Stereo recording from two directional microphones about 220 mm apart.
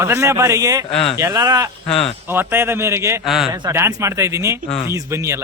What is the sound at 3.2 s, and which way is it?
Speech, centre (ahead or behind).